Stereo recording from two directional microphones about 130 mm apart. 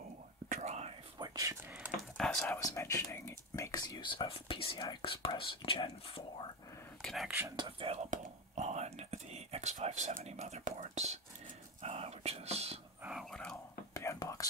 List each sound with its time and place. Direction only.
0.5 s whispering: 60° right (ahead or behind)
1.1 s whispering: 30° right (ahead or behind)
2.1 s whispering: 5° left (ahead or behind)
2.6 s speech: 20° left (ahead or behind); by 6.2 s 40° left (ahead or behind)
7.0 s speech: centre (ahead or behind)
7.5 s speech: 40° right (ahead or behind)
7.9 s whispering: 60° right (ahead or behind)
13.2 s whispering: 5° left (ahead or behind)
13.9 s whispering: 25° left (ahead or behind)